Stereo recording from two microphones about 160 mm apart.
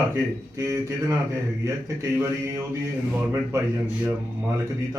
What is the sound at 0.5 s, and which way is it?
Speech, 20° right (ahead or behind).